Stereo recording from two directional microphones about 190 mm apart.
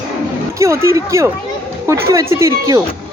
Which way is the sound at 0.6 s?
15° right (ahead or behind).